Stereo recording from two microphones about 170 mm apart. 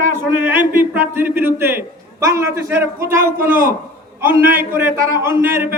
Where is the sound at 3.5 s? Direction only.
55° right (ahead or behind).